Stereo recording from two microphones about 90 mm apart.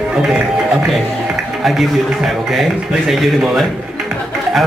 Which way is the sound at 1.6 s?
Centre (ahead or behind).